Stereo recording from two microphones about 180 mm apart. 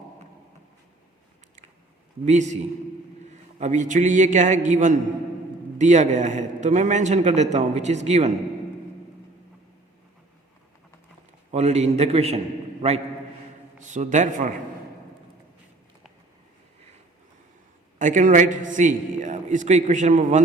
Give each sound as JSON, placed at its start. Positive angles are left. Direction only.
{"t": 2.2, "sound": "a man's voice", "side_deg": -40}
{"t": 11.5, "sound": "a man's voice", "side_deg": -40}
{"t": 18.0, "sound": "a man's voice", "side_deg": -45}